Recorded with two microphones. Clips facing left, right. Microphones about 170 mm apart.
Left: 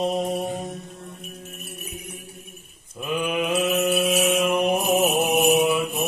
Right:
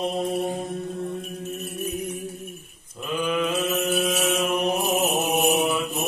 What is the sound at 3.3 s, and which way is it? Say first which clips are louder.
Mantra: left 1 dB; 15° left (ahead or behind).